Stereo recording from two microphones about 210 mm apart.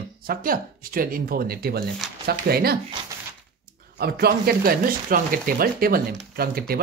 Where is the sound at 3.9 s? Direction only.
50° right (ahead or behind).